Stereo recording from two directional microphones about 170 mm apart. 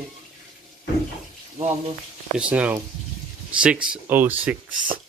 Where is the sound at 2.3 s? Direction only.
5° right (ahead or behind).